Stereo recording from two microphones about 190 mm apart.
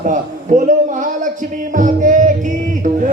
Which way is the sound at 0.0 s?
40° right (ahead or behind).